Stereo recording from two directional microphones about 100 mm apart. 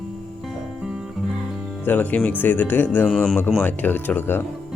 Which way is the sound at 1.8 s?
20° left (ahead or behind).